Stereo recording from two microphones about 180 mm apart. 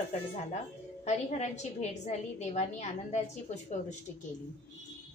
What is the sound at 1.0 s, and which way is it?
A woman's voice, 40° left (ahead or behind).